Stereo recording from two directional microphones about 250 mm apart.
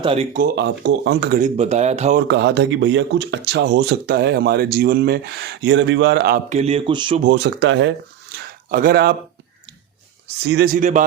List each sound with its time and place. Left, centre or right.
0.0 s speech: right
0.3 s speech: right
1.4 s speech: right
2.2 s speech: right
6.5 s speech: right
7.3 s speech: right
8.4 s a sound: right
10.4 s speech: right